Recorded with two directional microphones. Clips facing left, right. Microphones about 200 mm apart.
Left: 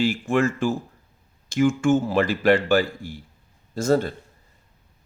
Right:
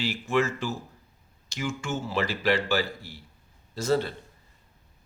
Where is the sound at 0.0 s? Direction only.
50° left (ahead or behind).